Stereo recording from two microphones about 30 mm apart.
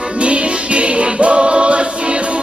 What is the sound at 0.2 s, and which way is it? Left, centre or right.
Music, right.